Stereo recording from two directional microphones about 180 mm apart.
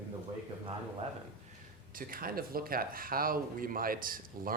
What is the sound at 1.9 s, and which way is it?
Speech, 50° right (ahead or behind).